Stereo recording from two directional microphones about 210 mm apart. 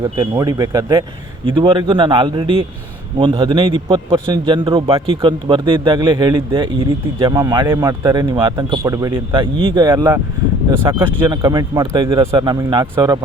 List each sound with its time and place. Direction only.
0.0 s a man's voice: 20° right (ahead or behind)